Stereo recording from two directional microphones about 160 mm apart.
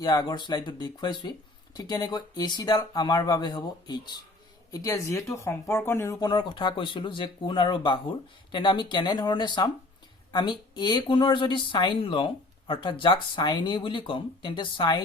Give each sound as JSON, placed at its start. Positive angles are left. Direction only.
{"t": 0.0, "sound": "speech", "side_deg": 25}